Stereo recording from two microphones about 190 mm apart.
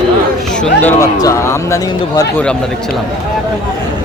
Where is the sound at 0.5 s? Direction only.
5° left (ahead or behind).